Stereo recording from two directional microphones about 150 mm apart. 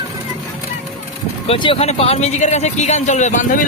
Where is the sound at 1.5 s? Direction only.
35° left (ahead or behind).